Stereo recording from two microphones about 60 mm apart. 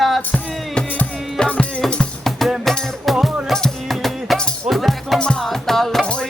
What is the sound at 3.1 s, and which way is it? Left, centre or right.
Music, centre.